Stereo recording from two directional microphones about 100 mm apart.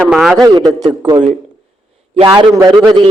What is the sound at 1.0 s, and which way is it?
A man's voice, 55° right (ahead or behind).